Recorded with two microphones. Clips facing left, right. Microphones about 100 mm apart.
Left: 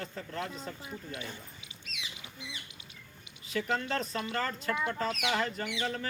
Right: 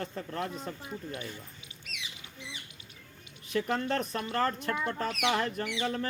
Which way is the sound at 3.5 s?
45° right (ahead or behind).